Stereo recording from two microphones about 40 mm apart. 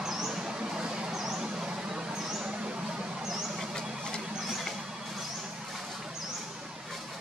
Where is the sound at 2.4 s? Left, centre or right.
Right.